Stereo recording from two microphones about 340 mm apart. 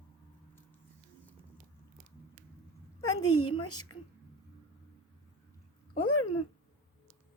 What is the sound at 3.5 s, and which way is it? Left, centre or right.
Speech, centre.